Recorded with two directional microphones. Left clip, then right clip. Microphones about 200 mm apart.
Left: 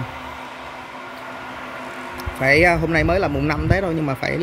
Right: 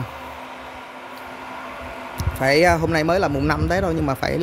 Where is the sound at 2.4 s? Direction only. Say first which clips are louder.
Left 1 dB; 15° right (ahead or behind).